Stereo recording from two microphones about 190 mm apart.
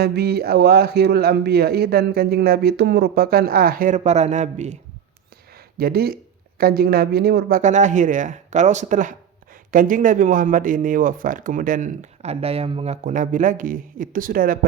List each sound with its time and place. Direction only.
0.0 s speech: 55° right (ahead or behind); by 4.8 s 40° right (ahead or behind)
5.7 s speech: 55° right (ahead or behind)
7.6 s speech: 40° right (ahead or behind)